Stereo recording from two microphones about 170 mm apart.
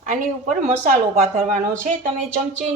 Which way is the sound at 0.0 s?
50° right (ahead or behind).